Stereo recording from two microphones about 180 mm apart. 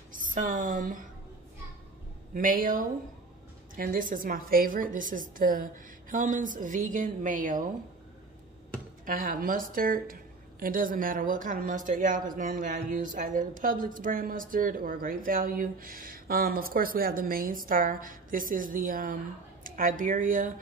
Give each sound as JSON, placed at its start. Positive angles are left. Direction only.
{"t": 0.1, "sound": "speech", "side_deg": -50}
{"t": 2.3, "sound": "speech", "side_deg": -50}
{"t": 9.0, "sound": "speech", "side_deg": -50}